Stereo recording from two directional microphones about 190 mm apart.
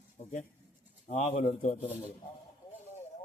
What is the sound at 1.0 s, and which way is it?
Speech, 35° left (ahead or behind).